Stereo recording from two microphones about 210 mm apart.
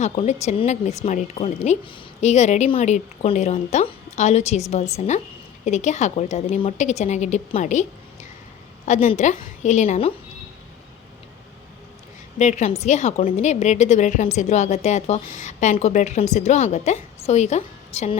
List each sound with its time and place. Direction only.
0.0 s speech: 35° left (ahead or behind)
12.4 s speech: 35° left (ahead or behind)